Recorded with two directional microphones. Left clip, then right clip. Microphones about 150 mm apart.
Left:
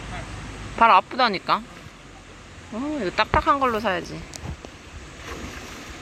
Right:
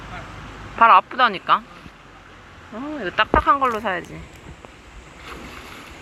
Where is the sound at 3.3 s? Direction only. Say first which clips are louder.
Right 3 dB; 25° left (ahead or behind).